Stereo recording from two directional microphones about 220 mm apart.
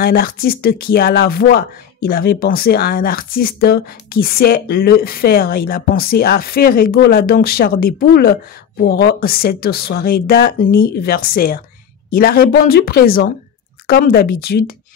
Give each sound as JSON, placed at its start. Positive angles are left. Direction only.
{"t": 0.0, "sound": "speech", "side_deg": 45}